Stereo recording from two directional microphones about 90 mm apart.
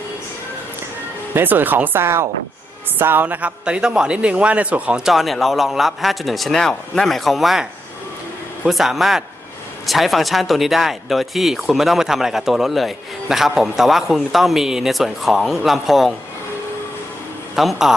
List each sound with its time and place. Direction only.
1.3 s speech: 25° right (ahead or behind); by 16.1 s centre (ahead or behind)
17.5 s a man's voice: centre (ahead or behind)